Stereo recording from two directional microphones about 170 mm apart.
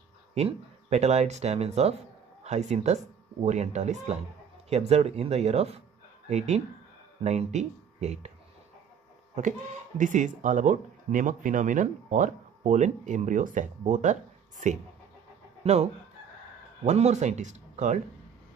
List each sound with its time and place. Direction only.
0.3 s speech: 35° right (ahead or behind)
9.9 s speech: 45° right (ahead or behind)
15.6 s speech: 40° right (ahead or behind)